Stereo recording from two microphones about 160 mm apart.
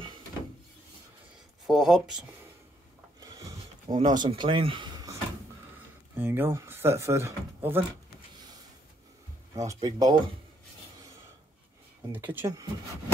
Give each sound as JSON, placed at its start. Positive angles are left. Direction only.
{"t": 1.7, "sound": "speech", "side_deg": 0}
{"t": 3.2, "sound": "a sound", "side_deg": -20}
{"t": 6.1, "sound": "speech", "side_deg": -15}
{"t": 9.6, "sound": "speech", "side_deg": -20}
{"t": 12.1, "sound": "speech", "side_deg": -10}